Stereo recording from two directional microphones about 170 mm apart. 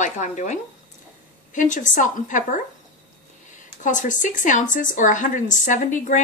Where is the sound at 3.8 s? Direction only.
50° left (ahead or behind).